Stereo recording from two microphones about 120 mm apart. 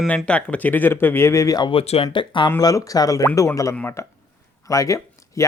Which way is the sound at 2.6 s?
30° left (ahead or behind).